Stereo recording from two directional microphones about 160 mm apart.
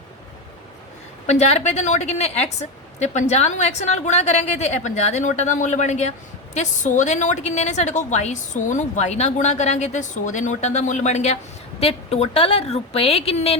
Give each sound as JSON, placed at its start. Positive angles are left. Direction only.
{"t": 1.3, "sound": "a woman's voice", "side_deg": 45}